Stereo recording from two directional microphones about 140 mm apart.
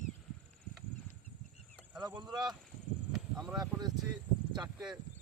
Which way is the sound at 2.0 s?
30° right (ahead or behind).